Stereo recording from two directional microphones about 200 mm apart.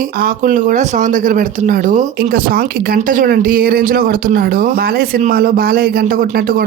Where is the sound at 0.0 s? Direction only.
45° right (ahead or behind).